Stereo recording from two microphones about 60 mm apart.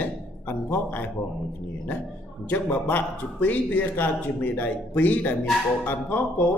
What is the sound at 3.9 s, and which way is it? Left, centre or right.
A man's voice, left.